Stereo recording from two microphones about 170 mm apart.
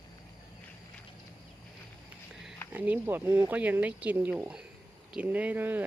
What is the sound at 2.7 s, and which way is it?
Speech, 10° right (ahead or behind).